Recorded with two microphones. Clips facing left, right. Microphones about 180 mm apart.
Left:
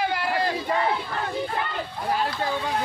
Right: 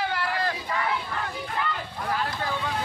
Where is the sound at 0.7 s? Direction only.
35° left (ahead or behind).